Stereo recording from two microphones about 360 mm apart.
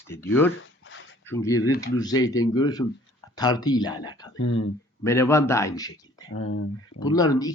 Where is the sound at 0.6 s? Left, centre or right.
Left.